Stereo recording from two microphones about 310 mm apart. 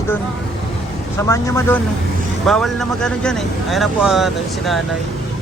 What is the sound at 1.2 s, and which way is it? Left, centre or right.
Speech, centre.